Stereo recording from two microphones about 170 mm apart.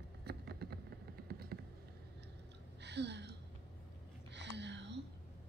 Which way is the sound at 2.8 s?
85° right.